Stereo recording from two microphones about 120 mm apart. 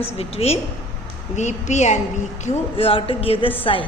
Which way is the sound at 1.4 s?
80° left.